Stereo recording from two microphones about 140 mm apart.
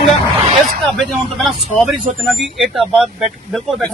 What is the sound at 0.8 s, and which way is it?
Speech, centre (ahead or behind).